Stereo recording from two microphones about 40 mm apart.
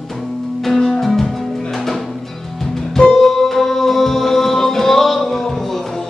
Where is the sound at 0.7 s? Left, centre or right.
Centre.